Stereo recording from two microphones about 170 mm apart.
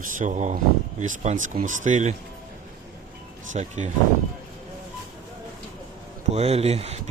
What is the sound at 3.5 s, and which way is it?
Speech, 45° right (ahead or behind).